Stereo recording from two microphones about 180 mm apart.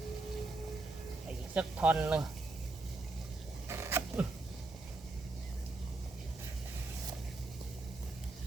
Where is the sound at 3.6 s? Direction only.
15° right (ahead or behind).